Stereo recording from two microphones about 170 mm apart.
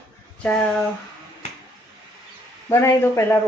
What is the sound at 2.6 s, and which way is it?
Speech, 15° left (ahead or behind).